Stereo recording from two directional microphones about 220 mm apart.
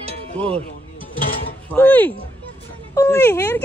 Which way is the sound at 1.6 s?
10° left (ahead or behind).